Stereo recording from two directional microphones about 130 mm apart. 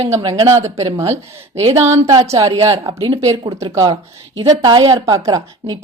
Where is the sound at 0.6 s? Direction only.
25° right (ahead or behind).